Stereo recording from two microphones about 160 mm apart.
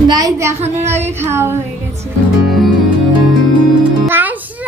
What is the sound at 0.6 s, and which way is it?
Speech, 45° right (ahead or behind).